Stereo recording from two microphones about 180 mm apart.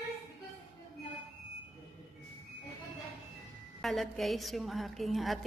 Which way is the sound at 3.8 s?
Centre (ahead or behind).